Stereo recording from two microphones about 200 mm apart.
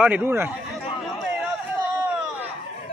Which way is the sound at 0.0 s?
10° right (ahead or behind).